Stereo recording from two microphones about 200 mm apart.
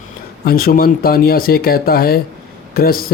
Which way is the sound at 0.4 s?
45° left (ahead or behind).